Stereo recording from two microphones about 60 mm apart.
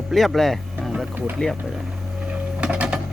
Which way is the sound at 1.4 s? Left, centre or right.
Centre.